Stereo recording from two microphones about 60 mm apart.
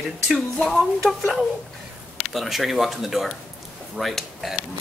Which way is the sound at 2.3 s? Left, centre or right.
Centre.